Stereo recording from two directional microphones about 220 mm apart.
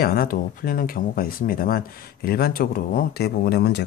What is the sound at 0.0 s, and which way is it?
Speech, 45° left (ahead or behind).